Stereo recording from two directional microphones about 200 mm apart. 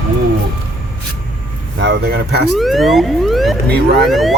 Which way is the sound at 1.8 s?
60° right (ahead or behind).